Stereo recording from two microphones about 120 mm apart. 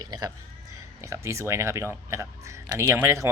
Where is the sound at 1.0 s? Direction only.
25° right (ahead or behind).